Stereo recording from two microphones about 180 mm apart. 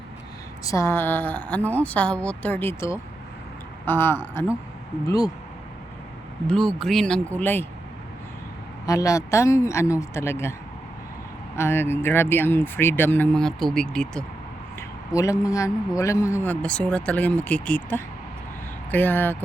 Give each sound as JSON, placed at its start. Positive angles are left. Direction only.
{"t": 0.6, "sound": "a man's voice", "side_deg": 15}
{"t": 6.5, "sound": "a man's voice", "side_deg": 0}
{"t": 8.9, "sound": "a man's voice", "side_deg": 20}
{"t": 11.5, "sound": "a man's voice", "side_deg": 15}
{"t": 14.8, "sound": "a man's voice", "side_deg": 15}